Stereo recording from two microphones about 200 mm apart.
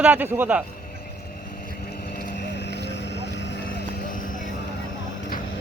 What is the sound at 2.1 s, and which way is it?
Vehicle, 50° left (ahead or behind).